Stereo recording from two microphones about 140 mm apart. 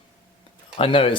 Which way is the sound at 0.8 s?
40° left (ahead or behind).